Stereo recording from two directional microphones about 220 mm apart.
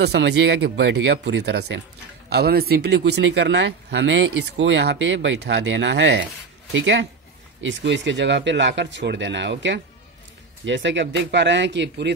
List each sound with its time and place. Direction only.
0.0 s speech: 50° right (ahead or behind)